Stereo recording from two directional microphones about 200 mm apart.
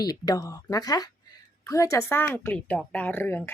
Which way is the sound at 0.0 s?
20° left (ahead or behind).